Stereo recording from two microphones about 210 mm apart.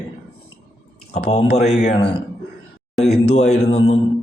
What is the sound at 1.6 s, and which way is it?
Speech, 35° left (ahead or behind).